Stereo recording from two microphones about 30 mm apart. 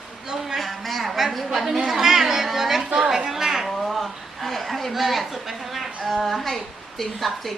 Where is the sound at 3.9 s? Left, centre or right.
Centre.